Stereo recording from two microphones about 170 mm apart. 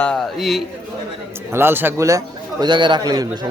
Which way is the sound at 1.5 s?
15° right (ahead or behind).